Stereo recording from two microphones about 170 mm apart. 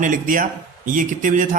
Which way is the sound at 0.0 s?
50° right (ahead or behind).